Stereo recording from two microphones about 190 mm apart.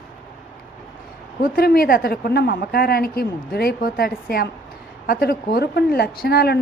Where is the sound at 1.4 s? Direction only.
50° left (ahead or behind).